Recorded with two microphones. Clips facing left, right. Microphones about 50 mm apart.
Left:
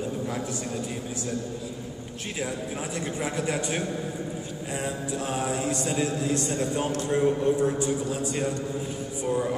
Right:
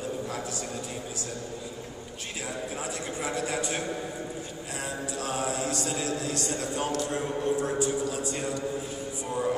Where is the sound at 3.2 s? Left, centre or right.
Left.